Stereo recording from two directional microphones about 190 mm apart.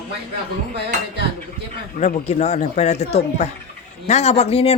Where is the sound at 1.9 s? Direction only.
35° left (ahead or behind).